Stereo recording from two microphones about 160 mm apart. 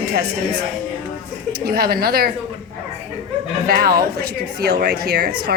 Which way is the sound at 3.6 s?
70° right (ahead or behind).